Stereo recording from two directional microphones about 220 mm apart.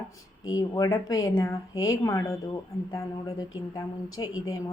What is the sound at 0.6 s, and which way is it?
A woman's voice, 15° left (ahead or behind).